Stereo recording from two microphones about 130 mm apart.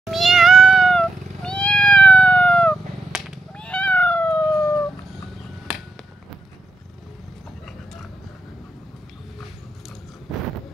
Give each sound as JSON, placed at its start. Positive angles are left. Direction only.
{"t": 0.0, "sound": "cat", "side_deg": 0}
{"t": 3.1, "sound": "honk", "side_deg": -5}
{"t": 3.5, "sound": "cat", "side_deg": 10}
{"t": 4.5, "sound": "cat", "side_deg": 25}